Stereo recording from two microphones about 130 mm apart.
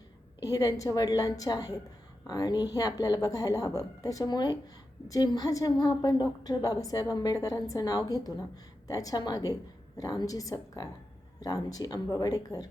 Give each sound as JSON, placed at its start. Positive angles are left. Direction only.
{"t": 0.5, "sound": "a woman's voice", "side_deg": 30}